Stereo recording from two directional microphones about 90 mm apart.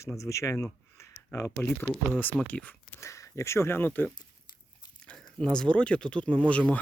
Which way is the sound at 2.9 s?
35° left (ahead or behind).